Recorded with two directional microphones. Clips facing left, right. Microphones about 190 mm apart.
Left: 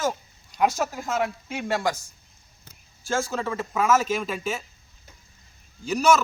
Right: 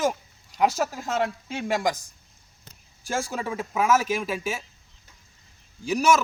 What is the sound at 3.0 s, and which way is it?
Speech, 15° right (ahead or behind).